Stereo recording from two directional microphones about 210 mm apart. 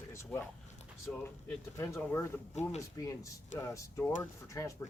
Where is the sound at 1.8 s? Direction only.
10° left (ahead or behind).